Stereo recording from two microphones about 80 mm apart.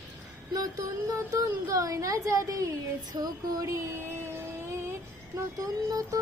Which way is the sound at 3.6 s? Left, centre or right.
Right.